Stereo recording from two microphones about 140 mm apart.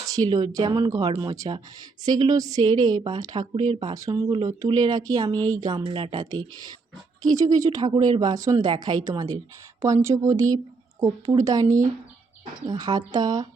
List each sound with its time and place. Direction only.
0.0 s a woman's voice: 30° right (ahead or behind)
4.3 s a woman's voice: 35° right (ahead or behind)
12.6 s a woman's voice: 30° right (ahead or behind)